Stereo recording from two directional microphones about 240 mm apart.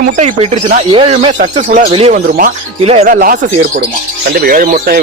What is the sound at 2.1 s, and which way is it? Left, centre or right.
Speech, right.